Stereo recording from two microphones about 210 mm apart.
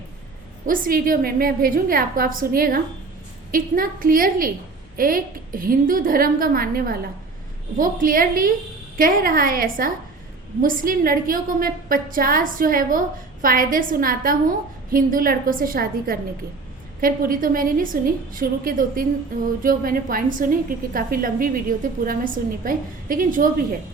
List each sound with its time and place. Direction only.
0.6 s a woman's voice: 40° right (ahead or behind)